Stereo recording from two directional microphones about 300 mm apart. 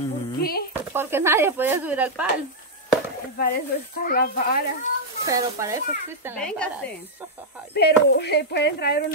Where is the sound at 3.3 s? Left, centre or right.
Left.